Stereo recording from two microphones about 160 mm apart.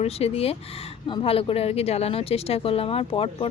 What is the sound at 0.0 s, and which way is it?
Speech, 40° left (ahead or behind).